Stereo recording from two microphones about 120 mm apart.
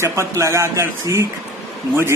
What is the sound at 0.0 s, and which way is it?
A man's voice, 25° right (ahead or behind).